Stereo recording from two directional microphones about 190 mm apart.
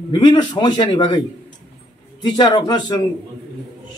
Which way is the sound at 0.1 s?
25° left (ahead or behind).